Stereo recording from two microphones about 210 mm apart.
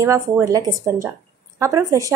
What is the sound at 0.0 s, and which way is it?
Speech, 15° right (ahead or behind).